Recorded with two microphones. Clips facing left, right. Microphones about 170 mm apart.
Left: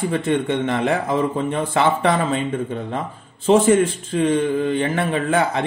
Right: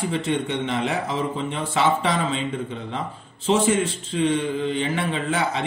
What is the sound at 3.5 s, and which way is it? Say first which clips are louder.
A man's voice: left 6 dB; 50° left (ahead or behind).